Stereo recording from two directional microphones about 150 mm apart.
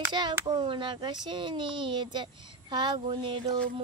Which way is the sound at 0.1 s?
30° right (ahead or behind).